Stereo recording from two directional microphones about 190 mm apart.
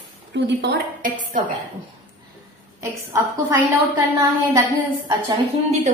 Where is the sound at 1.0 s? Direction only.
45° right (ahead or behind).